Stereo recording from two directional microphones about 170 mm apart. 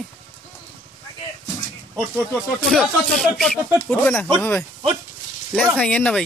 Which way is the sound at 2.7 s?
Centre (ahead or behind).